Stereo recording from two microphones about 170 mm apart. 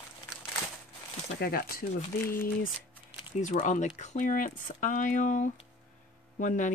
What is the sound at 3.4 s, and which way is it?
Speech, 45° left (ahead or behind).